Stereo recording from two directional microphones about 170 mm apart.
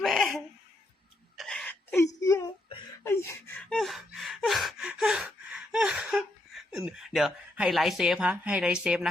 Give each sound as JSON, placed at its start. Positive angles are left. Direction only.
{"t": 0.0, "sound": "laughter", "side_deg": 0}
{"t": 1.4, "sound": "wail", "side_deg": 5}
{"t": 2.2, "sound": "whimper", "side_deg": 20}
{"t": 3.0, "sound": "gasp", "side_deg": 15}